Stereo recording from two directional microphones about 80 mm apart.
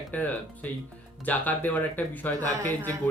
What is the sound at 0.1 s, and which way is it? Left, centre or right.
Speech, centre.